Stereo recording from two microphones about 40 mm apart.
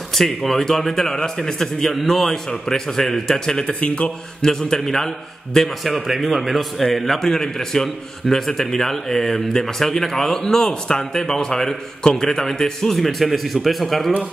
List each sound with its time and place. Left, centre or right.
0.1 s speech: centre
3.8 s a man's voice: left
4.4 s speech: centre
5.9 s a man's voice: centre